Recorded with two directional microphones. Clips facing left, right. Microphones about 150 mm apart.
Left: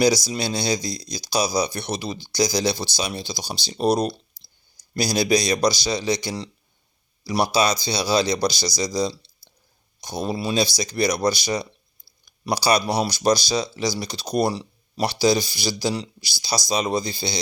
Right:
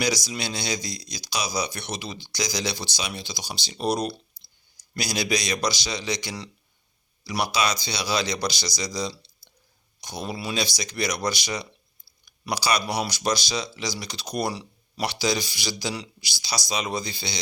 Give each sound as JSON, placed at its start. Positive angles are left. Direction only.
{"t": 0.0, "sound": "speech", "side_deg": 30}